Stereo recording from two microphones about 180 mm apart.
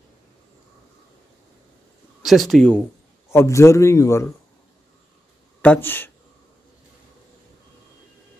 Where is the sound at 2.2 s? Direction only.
Centre (ahead or behind); by 4.3 s 15° left (ahead or behind).